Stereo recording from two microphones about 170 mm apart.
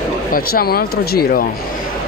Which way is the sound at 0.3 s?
60° left (ahead or behind).